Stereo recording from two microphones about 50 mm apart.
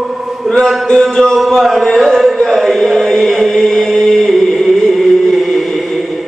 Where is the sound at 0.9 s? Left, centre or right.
Centre.